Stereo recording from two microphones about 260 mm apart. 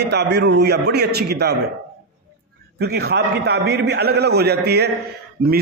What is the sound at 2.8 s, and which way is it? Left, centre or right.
A man's voice, right.